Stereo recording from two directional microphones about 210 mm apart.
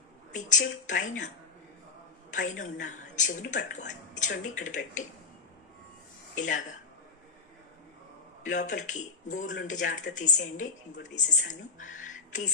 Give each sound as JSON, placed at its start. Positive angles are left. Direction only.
{"t": 0.3, "sound": "a woman's voice", "side_deg": 35}
{"t": 2.3, "sound": "a woman's voice", "side_deg": 35}
{"t": 6.3, "sound": "a woman's voice", "side_deg": 35}
{"t": 8.5, "sound": "a woman's voice", "side_deg": 35}